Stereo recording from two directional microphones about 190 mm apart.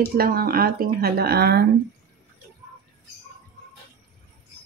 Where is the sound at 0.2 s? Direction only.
55° right (ahead or behind).